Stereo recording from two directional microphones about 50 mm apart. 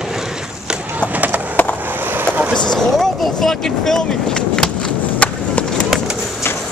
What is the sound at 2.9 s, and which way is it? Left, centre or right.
Vehicle, centre.